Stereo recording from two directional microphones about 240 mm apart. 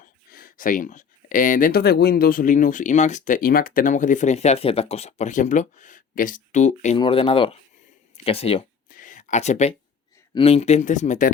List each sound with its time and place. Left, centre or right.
0.0 s speech: left
8.9 s a sound: left
10.3 s speech: left